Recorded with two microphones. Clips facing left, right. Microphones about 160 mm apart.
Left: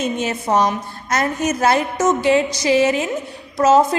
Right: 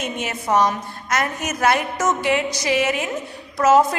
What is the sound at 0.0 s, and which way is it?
A woman's voice, 30° left (ahead or behind).